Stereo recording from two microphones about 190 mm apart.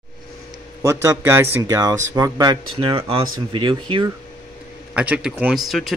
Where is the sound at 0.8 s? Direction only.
15° right (ahead or behind).